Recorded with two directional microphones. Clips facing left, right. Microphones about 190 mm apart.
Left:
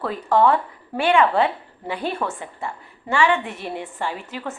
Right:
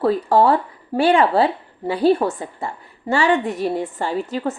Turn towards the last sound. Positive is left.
turn(degrees=-35)  # may be behind; listen again after turning